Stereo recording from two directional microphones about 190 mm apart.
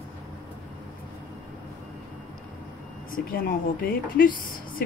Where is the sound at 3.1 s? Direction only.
50° left (ahead or behind).